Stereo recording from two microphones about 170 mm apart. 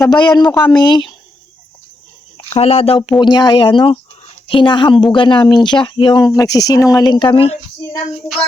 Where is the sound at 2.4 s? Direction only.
35° left (ahead or behind).